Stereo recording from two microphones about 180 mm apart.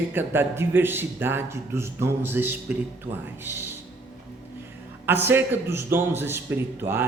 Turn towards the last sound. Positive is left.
turn(degrees=-10)  # may be behind; listen again after turning